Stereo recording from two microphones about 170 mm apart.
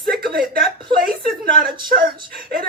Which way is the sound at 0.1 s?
60° right (ahead or behind).